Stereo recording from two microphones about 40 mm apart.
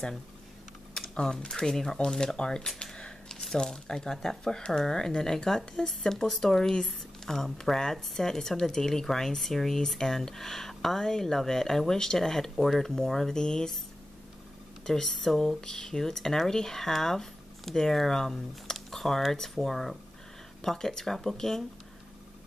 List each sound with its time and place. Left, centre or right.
1.2 s speech: centre
2.8 s a sound: left
3.5 s speech: left
14.9 s speech: centre